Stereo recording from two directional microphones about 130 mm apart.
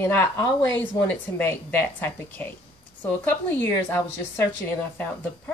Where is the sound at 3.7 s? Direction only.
20° left (ahead or behind).